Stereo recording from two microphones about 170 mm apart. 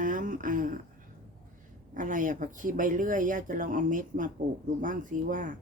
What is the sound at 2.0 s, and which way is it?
Speech, 50° right (ahead or behind).